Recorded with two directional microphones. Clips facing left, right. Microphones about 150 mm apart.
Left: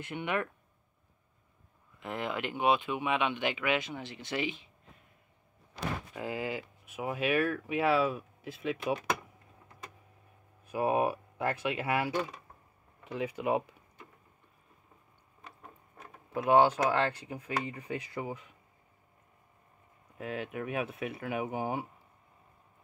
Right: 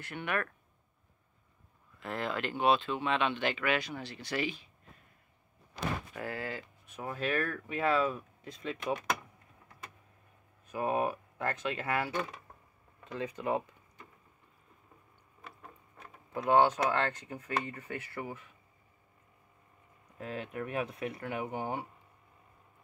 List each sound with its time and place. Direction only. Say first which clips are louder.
0.0 s speech: left 2 dB; 20° left (ahead or behind)
2.0 s speech: even; 15° left (ahead or behind)
6.1 s speech: left 3 dB; 15° left (ahead or behind)
10.7 s speech: left 3 dB; 15° left (ahead or behind)
16.3 s speech: left 2 dB; 10° left (ahead or behind)
20.2 s speech: left 2 dB; 5° left (ahead or behind)